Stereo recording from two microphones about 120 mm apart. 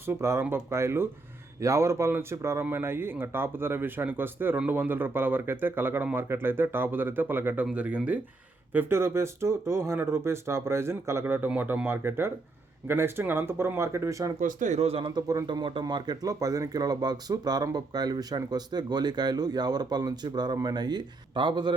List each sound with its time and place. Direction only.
0.0 s speech: 20° right (ahead or behind)
14.3 s speech: 90° right; by 15.1 s 55° right (ahead or behind)
15.1 s speech: 35° right (ahead or behind)